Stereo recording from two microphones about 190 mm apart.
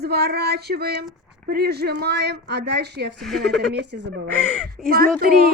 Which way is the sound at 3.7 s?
65° right (ahead or behind).